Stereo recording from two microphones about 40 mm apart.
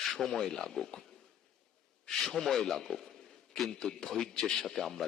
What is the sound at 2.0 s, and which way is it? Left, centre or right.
A man's voice, centre.